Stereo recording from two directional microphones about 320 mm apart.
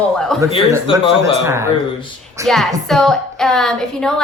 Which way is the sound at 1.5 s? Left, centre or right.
Centre.